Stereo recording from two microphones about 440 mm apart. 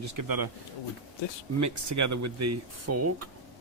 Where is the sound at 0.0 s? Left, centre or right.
Right.